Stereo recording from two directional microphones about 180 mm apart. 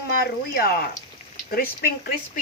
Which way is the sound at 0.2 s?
60° left (ahead or behind).